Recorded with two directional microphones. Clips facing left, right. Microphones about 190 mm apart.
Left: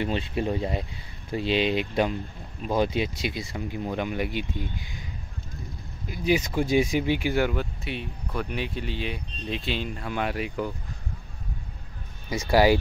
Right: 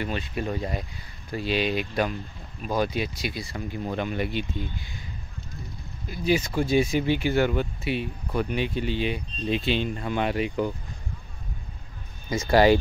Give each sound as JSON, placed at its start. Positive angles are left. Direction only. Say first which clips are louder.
{"t": 0.0, "sound": "speech", "louder": "left 3 dB", "side_deg": 25}
{"t": 6.0, "sound": "speech", "louder": "even", "side_deg": 15}
{"t": 7.5, "sound": "speech", "louder": "right 4 dB", "side_deg": -5}
{"t": 12.3, "sound": "speech", "louder": "right 1 dB", "side_deg": 10}